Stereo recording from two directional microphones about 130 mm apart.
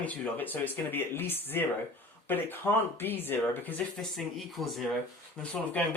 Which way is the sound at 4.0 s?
Centre (ahead or behind).